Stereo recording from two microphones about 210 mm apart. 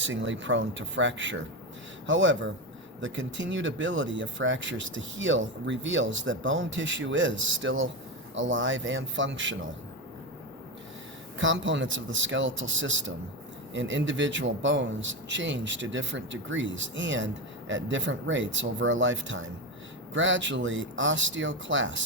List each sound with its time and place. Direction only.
0.0 s a man's voice: 65° right (ahead or behind)
11.3 s a man's voice: 60° right (ahead or behind)